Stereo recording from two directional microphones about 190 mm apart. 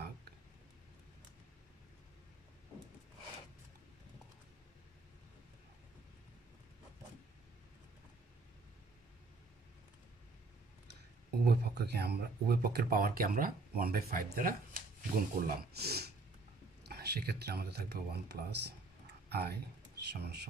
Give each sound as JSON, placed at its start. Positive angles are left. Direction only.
{"t": 11.4, "sound": "speech", "side_deg": -55}